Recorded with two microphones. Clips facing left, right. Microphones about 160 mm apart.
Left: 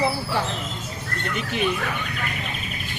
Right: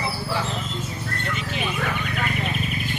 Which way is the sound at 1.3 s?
60° left (ahead or behind).